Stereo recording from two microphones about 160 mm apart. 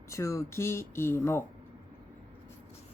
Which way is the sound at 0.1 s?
20° left (ahead or behind).